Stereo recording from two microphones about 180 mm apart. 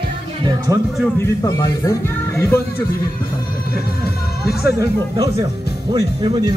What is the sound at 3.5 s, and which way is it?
Speech, 55° left (ahead or behind).